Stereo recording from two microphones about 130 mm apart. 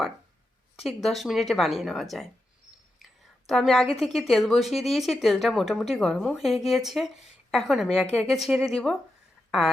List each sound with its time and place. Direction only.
0.8 s a woman's voice: centre (ahead or behind)